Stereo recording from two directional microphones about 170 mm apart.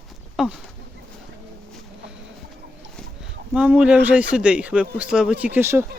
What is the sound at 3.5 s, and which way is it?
A man's voice, 5° right (ahead or behind).